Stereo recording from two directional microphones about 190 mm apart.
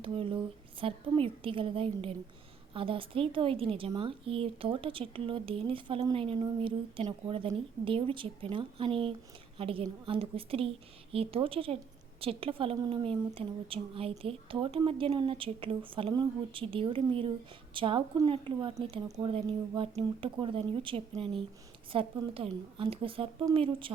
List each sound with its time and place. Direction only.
0.0 s a woman's voice: 30° right (ahead or behind)